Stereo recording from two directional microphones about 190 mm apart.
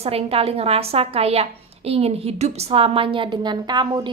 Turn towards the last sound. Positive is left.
turn(degrees=-25)  # may be behind; listen again after turning